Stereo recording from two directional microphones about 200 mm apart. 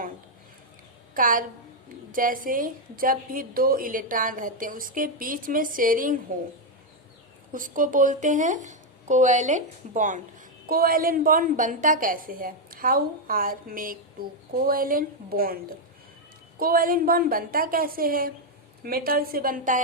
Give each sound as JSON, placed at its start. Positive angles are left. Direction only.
{"t": 1.1, "sound": "a woman's voice", "side_deg": -45}
{"t": 7.5, "sound": "a woman's voice", "side_deg": -40}
{"t": 16.6, "sound": "a woman's voice", "side_deg": -45}